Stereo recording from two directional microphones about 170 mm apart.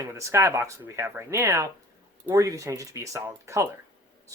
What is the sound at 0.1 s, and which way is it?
Speech, 15° right (ahead or behind).